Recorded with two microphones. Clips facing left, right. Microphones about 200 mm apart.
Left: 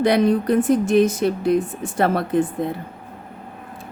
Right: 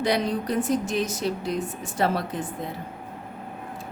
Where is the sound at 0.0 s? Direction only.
55° left (ahead or behind).